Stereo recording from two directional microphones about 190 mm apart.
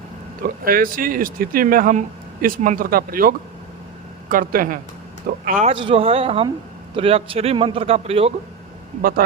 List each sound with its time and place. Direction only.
0.6 s speech: 50° right (ahead or behind)
5.7 s a man's voice: 30° right (ahead or behind)
9.0 s speech: 50° right (ahead or behind)